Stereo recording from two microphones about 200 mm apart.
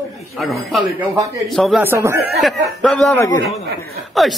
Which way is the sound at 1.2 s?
15° right (ahead or behind).